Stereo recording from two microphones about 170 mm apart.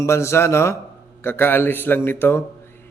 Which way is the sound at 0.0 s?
15° left (ahead or behind).